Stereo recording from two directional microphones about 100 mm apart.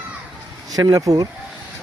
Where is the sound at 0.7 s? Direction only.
40° right (ahead or behind).